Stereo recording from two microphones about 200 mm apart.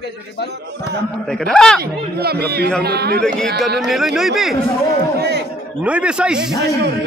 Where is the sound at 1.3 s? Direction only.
5° left (ahead or behind).